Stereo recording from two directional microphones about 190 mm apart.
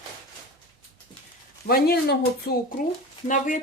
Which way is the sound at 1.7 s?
55° left (ahead or behind).